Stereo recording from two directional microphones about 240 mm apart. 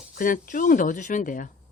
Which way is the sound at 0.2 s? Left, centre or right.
Left.